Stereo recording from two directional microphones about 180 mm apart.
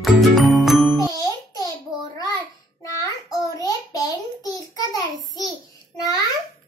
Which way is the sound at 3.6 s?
20° left (ahead or behind).